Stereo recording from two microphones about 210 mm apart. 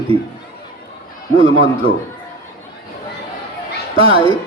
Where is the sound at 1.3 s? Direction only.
65° left (ahead or behind).